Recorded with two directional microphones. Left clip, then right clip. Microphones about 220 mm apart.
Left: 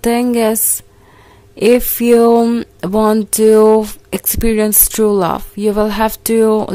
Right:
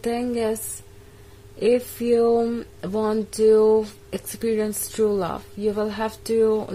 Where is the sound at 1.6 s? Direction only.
40° left (ahead or behind).